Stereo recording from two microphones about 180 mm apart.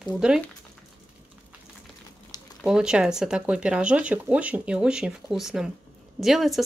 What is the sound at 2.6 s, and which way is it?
A woman's voice, 5° right (ahead or behind).